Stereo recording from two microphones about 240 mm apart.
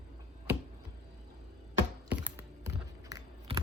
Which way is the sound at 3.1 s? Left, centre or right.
Centre.